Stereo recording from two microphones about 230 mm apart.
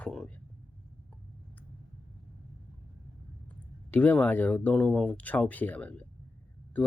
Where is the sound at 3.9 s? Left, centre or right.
Centre.